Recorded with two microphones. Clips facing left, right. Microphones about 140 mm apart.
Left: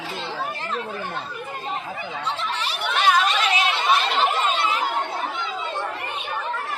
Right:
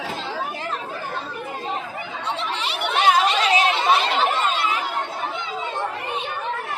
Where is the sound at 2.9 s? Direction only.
25° right (ahead or behind).